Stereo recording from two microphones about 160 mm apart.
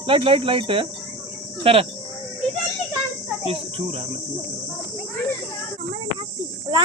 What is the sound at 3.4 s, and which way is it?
Cricket, 35° right (ahead or behind).